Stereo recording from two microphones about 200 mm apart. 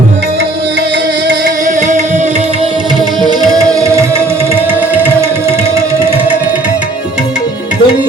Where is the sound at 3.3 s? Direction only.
20° right (ahead or behind).